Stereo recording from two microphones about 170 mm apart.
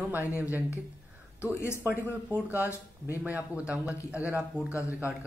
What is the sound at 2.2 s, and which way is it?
Speech, 10° right (ahead or behind).